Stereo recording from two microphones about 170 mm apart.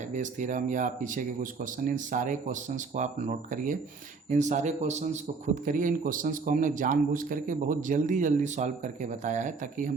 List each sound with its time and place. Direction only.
0.1 s a man's voice: 45° right (ahead or behind)